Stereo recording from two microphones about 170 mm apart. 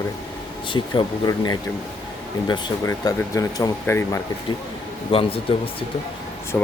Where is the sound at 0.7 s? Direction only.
30° left (ahead or behind).